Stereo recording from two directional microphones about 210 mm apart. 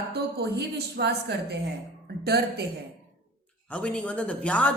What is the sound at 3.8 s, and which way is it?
Speech, 5° left (ahead or behind).